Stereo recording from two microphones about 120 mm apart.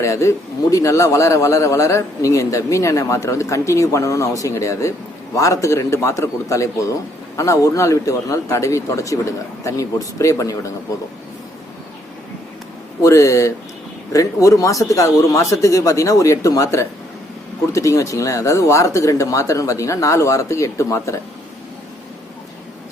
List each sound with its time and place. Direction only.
0.0 s a man's voice: 25° left (ahead or behind)
13.0 s a man's voice: 25° left (ahead or behind)